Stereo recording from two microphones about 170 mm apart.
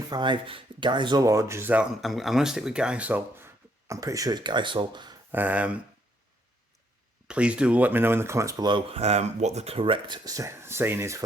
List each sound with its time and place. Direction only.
0.1 s speech: 25° right (ahead or behind)
5.3 s speech: 10° right (ahead or behind)
7.3 s speech: 5° right (ahead or behind)